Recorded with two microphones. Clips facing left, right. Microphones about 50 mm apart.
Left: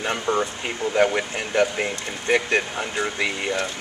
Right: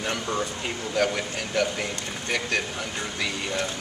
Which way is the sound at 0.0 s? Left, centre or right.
Left.